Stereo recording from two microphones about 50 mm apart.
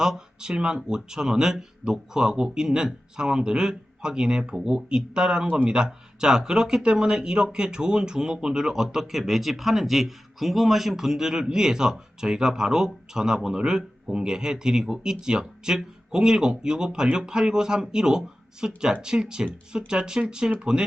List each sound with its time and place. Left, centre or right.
0.0 s speech: centre